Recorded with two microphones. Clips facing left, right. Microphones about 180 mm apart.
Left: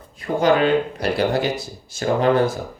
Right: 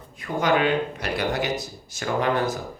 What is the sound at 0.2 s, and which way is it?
Speech, 30° left (ahead or behind).